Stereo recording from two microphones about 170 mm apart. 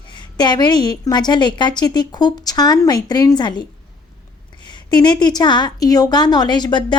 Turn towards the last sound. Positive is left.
turn(degrees=25)  # may be behind; listen again after turning